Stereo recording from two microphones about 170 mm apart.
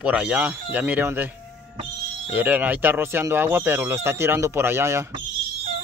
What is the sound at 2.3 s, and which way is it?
Speech, 10° right (ahead or behind).